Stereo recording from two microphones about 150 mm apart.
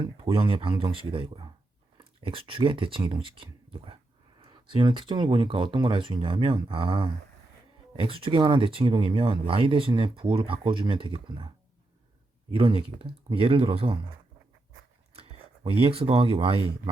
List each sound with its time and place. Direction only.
0.0 s speech: 35° right (ahead or behind)
12.5 s speech: 35° right (ahead or behind)
15.1 s speech: 40° right (ahead or behind)